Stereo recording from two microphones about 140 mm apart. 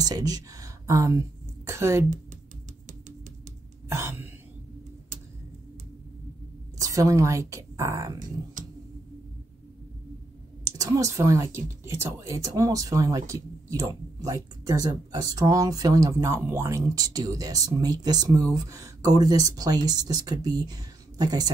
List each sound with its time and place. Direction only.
0.0 s speech: 25° right (ahead or behind)
3.9 s cough: 15° right (ahead or behind)
6.8 s a woman's voice: 25° right (ahead or behind)
10.6 s speech: 25° right (ahead or behind)